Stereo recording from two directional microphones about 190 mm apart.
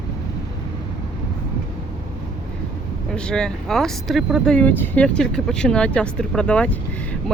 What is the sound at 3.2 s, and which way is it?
Speech, 5° left (ahead or behind).